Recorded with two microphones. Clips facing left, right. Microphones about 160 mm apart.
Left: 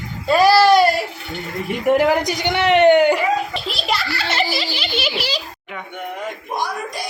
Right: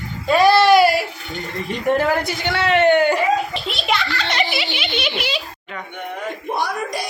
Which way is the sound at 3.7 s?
Centre (ahead or behind).